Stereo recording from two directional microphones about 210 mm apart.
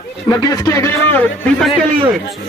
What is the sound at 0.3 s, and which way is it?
A man's voice, 20° left (ahead or behind).